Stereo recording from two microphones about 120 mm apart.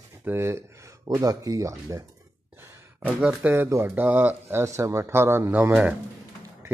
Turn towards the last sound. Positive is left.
turn(degrees=-10)  # may be behind; listen again after turning